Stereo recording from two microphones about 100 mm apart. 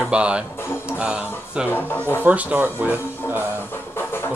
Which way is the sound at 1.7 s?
20° left (ahead or behind).